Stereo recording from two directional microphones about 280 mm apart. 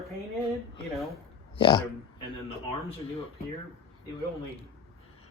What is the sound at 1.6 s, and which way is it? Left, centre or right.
Speech, centre.